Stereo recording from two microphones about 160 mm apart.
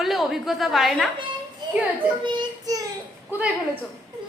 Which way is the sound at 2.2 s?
25° right (ahead or behind).